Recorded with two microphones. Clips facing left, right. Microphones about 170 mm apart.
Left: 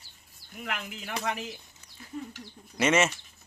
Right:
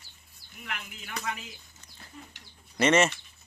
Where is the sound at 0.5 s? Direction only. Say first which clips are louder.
Left 5 dB; 45° left (ahead or behind).